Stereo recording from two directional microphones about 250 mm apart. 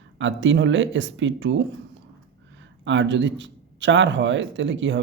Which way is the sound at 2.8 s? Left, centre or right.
Right.